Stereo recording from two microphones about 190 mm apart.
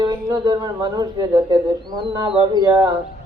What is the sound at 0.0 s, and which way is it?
A woman's voice, 25° right (ahead or behind).